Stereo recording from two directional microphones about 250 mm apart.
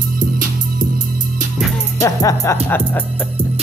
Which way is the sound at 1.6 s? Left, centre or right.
Centre.